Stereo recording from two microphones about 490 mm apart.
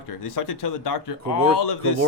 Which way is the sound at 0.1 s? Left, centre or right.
Left.